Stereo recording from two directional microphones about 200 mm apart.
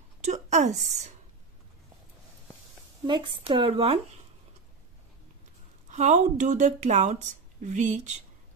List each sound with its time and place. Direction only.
0.2 s a sound: 35° right (ahead or behind)
3.1 s speech: 25° right (ahead or behind)
5.9 s a woman's voice: 35° right (ahead or behind)